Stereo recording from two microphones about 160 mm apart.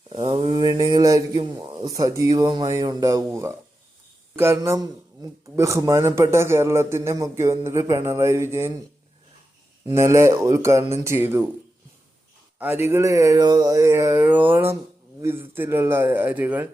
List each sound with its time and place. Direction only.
0.1 s mantra: 30° right (ahead or behind)
1.5 s speech: 30° right (ahead or behind)
9.9 s speech: 15° right (ahead or behind)
12.5 s speech: 10° right (ahead or behind)